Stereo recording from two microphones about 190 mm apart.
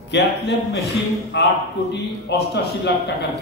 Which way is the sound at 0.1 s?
65° left (ahead or behind).